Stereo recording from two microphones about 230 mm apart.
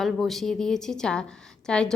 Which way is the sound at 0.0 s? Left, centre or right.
Centre.